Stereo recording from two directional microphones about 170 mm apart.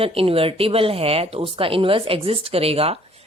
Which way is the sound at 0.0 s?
35° right (ahead or behind).